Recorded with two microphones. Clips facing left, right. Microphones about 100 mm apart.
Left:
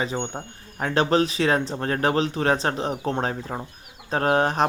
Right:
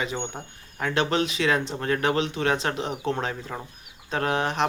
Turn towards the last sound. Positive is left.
turn(degrees=40)  # may be behind; listen again after turning